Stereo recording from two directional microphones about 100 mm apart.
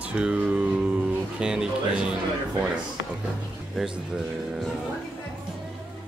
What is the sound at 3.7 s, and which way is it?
Speech, 5° right (ahead or behind).